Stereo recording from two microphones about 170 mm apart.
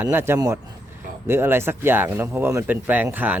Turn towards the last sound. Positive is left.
turn(degrees=-10)  # may be behind; listen again after turning